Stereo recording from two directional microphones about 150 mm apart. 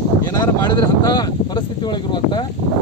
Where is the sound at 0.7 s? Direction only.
25° left (ahead or behind).